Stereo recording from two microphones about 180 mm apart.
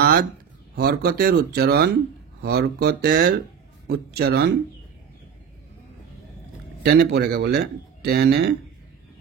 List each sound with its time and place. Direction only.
0.0 s speech: 55° right (ahead or behind)
6.8 s speech: 65° right (ahead or behind)